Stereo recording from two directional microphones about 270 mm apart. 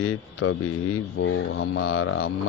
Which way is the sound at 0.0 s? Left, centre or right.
Left.